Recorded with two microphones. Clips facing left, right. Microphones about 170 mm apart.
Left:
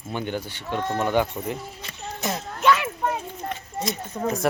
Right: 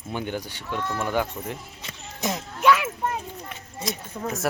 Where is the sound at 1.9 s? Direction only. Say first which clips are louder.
Even; 15° right (ahead or behind).